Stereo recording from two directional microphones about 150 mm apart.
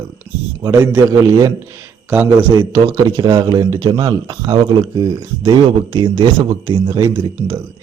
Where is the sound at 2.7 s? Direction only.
25° right (ahead or behind).